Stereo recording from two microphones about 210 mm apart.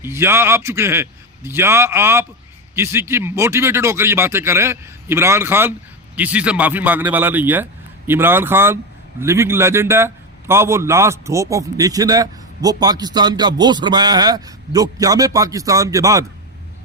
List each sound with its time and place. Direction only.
0.0 s a man's voice: 10° right (ahead or behind)